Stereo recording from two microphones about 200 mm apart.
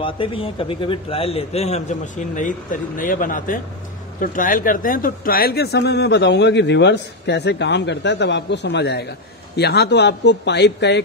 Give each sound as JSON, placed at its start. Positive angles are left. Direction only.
{"t": 0.0, "sound": "a man's voice", "side_deg": 25}